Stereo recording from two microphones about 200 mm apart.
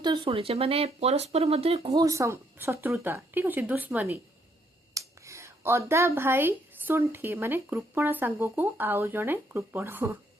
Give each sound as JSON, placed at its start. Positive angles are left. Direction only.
{"t": 0.0, "sound": "speech", "side_deg": -25}
{"t": 2.0, "sound": "speech", "side_deg": -15}